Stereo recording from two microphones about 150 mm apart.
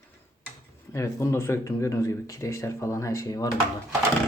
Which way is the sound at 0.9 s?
20° left (ahead or behind).